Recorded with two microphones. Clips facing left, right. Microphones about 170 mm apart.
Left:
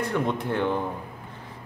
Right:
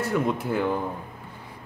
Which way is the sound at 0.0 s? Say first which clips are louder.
Right 1 dB; 5° right (ahead or behind).